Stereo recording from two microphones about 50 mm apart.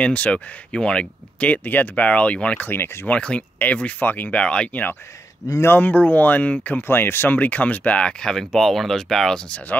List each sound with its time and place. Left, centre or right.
0.0 s speech: left
1.5 s speech: left
2.8 s speech: left
3.1 s speech: left
4.3 s speech: left
5.7 s speech: left; by 9.4 s centre